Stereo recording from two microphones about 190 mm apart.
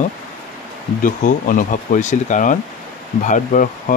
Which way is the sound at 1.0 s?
45° left (ahead or behind).